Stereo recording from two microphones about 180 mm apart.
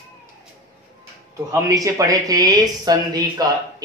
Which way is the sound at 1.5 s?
20° right (ahead or behind).